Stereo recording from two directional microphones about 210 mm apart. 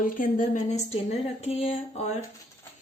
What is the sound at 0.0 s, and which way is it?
Speech, 40° left (ahead or behind).